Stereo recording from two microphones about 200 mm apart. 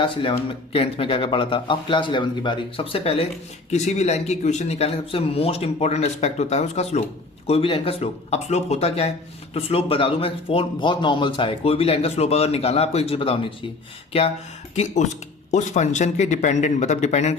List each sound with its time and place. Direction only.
0.0 s speech: 25° left (ahead or behind)
15.5 s speech: 35° left (ahead or behind)